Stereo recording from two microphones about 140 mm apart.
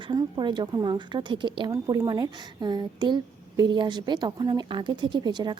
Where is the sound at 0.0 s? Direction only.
30° right (ahead or behind).